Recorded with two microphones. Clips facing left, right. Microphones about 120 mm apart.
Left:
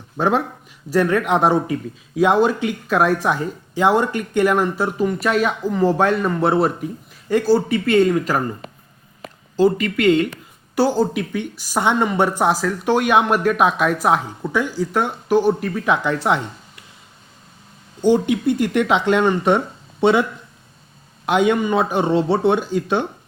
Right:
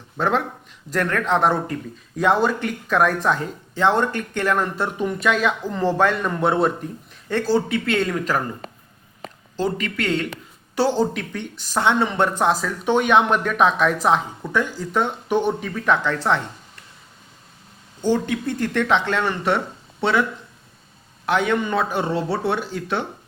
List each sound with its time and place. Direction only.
0.2 s a man's voice: 15° left (ahead or behind)
9.6 s a man's voice: 5° left (ahead or behind)
18.0 s speech: 15° left (ahead or behind)
21.2 s a man's voice: 15° left (ahead or behind)